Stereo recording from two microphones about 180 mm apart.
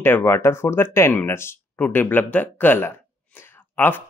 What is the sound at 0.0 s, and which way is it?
Speech, 10° left (ahead or behind).